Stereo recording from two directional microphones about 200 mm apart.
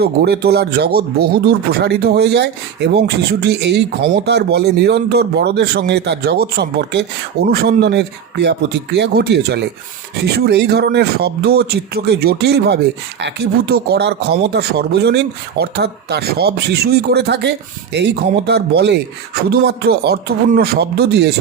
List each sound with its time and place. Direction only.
0.0 s speech: 50° right (ahead or behind)